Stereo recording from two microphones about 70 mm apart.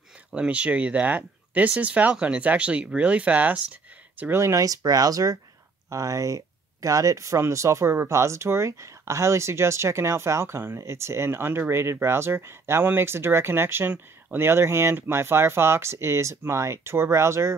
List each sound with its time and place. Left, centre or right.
0.3 s speech: centre
4.3 s speech: right